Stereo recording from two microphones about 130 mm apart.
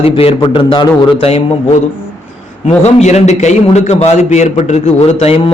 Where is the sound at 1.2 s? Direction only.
50° left (ahead or behind).